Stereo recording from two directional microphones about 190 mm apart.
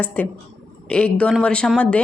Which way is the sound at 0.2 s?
10° left (ahead or behind).